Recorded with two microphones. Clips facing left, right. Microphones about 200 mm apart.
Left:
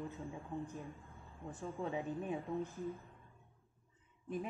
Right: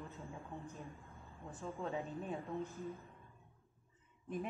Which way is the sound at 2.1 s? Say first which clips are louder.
Left 3 dB; 15° left (ahead or behind).